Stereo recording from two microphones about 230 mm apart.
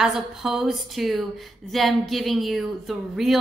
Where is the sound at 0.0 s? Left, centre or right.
Centre.